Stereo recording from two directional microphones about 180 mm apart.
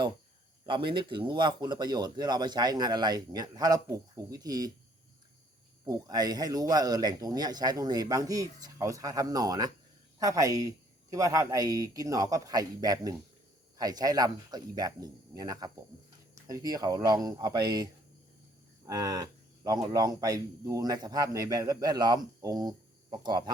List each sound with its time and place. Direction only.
0.6 s speech: 25° right (ahead or behind)
5.8 s speech: 20° right (ahead or behind)
18.9 s speech: 20° right (ahead or behind)